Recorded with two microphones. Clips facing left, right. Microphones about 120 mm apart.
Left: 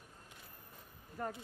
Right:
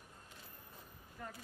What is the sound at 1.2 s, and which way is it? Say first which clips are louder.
Speech: left 8 dB; 45° left (ahead or behind).